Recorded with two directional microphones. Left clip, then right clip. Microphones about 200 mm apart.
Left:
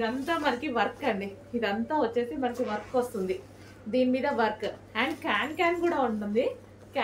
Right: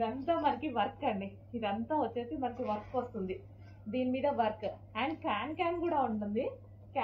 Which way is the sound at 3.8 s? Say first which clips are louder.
Left 6 dB; 20° left (ahead or behind).